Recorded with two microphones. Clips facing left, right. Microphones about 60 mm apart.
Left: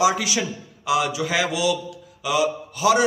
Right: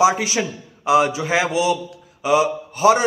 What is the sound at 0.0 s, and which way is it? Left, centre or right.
A man's voice, right.